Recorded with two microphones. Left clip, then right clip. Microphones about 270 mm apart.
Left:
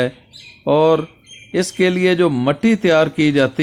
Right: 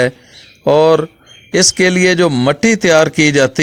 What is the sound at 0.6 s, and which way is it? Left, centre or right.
A man's voice, right.